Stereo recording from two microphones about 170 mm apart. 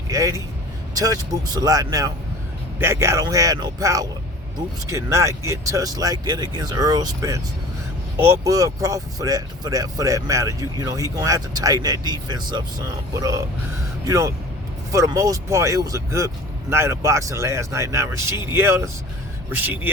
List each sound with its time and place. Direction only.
0.1 s speech: 20° right (ahead or behind)